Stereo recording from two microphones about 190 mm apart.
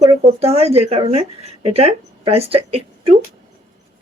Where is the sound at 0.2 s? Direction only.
30° right (ahead or behind).